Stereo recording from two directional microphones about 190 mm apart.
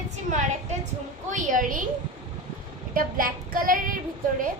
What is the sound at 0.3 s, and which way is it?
A woman's voice, 40° right (ahead or behind).